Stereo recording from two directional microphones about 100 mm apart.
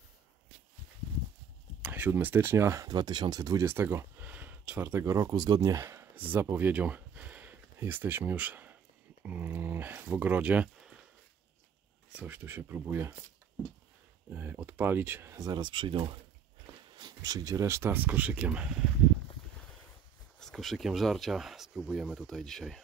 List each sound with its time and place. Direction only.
1.8 s speech: 20° right (ahead or behind)
5.3 s speech: 40° right (ahead or behind); by 8.7 s 15° right (ahead or behind)
9.2 s dog: 20° right (ahead or behind)
12.2 s speech: 20° right (ahead or behind)
14.3 s speech: 20° right (ahead or behind)
15.3 s speech: 45° right (ahead or behind)
16.9 s speech: 40° right (ahead or behind); by 18.9 s 10° right (ahead or behind)
20.3 s speech: 5° left (ahead or behind)